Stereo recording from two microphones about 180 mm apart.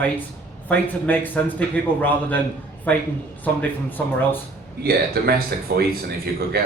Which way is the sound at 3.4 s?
10° left (ahead or behind).